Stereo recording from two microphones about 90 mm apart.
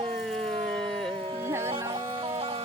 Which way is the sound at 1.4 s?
30° right (ahead or behind).